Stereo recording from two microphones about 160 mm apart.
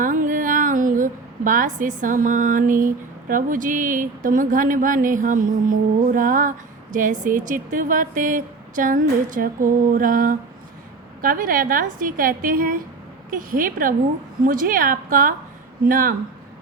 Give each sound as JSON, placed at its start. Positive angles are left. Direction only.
{"t": 0.0, "sound": "a woman's voice", "side_deg": -55}